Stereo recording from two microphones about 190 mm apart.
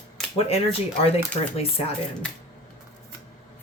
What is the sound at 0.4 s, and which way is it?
Speech, 30° left (ahead or behind).